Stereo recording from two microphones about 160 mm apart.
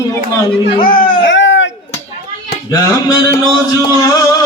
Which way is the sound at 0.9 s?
60° left (ahead or behind).